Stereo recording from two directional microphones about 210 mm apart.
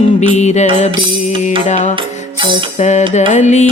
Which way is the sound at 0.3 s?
35° left (ahead or behind).